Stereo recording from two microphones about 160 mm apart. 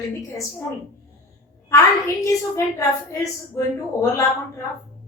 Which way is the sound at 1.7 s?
20° left (ahead or behind).